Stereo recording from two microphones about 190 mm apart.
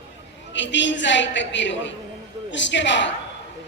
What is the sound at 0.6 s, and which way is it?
A woman's voice, 70° left (ahead or behind).